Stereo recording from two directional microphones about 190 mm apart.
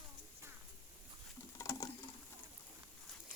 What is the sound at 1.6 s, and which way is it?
Patter, 15° left (ahead or behind).